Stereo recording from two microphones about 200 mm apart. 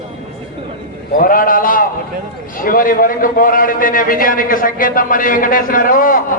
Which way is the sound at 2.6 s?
45° left (ahead or behind).